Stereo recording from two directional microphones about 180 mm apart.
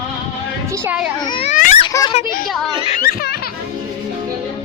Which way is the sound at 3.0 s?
60° left (ahead or behind).